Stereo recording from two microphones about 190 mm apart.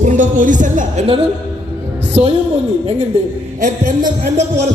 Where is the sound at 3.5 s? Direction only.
45° right (ahead or behind).